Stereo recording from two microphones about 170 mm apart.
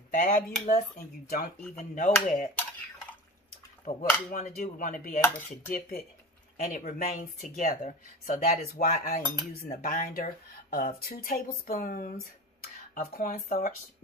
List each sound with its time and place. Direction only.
0.1 s speech: 50° left (ahead or behind)
3.8 s speech: 45° left (ahead or behind)